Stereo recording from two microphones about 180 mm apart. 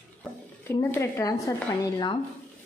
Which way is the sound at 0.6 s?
15° left (ahead or behind).